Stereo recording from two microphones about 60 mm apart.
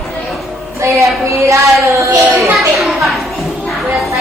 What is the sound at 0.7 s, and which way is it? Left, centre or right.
A woman's voice, right.